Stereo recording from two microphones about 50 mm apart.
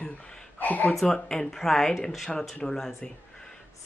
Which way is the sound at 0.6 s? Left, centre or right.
Left.